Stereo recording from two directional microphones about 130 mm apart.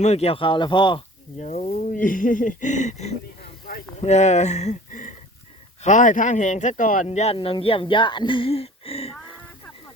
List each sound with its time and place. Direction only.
0.0 s speech: 55° left (ahead or behind); by 1.0 s 35° left (ahead or behind)
1.4 s speech: 65° left (ahead or behind)
7.3 s speech: 45° left (ahead or behind)